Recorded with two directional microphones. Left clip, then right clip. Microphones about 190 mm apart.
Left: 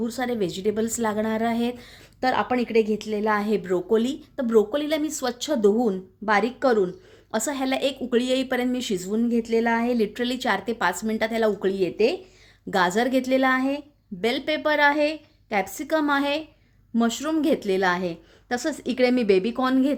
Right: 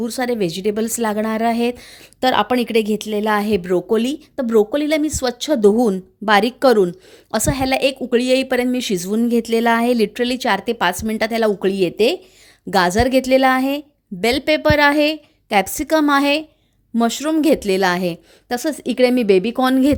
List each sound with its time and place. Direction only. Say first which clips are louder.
0.0 s a woman's voice: right 6 dB; 45° right (ahead or behind)